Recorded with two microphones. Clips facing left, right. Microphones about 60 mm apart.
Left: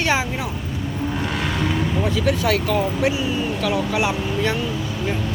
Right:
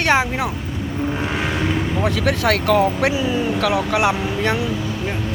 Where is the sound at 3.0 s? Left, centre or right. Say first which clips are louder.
Right 2 dB; right.